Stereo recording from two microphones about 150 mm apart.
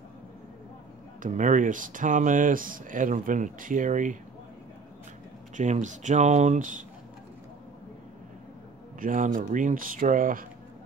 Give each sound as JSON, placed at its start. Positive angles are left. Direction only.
{"t": 1.2, "sound": "speech", "side_deg": -55}
{"t": 5.6, "sound": "speech", "side_deg": -55}
{"t": 9.0, "sound": "speech", "side_deg": -60}